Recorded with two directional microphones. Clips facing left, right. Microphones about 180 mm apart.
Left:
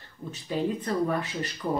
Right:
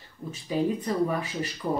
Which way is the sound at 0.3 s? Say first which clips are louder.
Right 2 dB; 10° right (ahead or behind).